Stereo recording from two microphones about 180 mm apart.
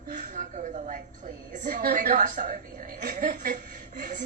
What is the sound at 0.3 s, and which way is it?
A woman's voice, 45° right (ahead or behind).